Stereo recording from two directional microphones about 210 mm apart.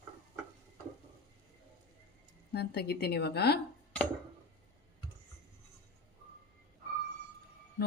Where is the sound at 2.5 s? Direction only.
50° left (ahead or behind).